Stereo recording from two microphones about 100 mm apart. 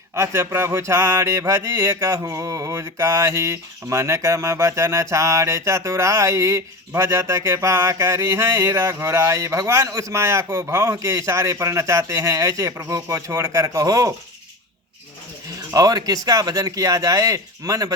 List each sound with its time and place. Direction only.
0.1 s mantra: 30° right (ahead or behind)
15.7 s mantra: 35° right (ahead or behind)